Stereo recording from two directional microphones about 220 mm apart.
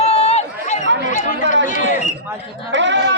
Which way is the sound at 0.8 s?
55° right (ahead or behind).